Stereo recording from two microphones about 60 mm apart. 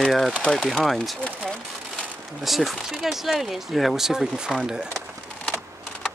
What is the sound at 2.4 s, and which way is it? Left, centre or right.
Speech, centre.